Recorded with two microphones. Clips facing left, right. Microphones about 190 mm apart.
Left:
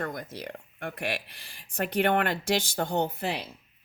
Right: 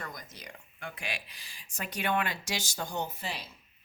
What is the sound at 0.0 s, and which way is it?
Speech, 60° left (ahead or behind).